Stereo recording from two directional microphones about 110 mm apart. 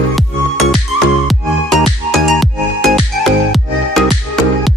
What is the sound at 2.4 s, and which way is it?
Music, centre (ahead or behind).